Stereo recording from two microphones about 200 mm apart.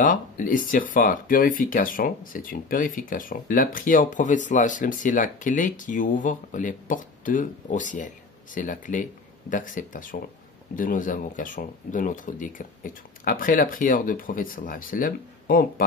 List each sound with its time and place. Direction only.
0.0 s speech: 45° left (ahead or behind)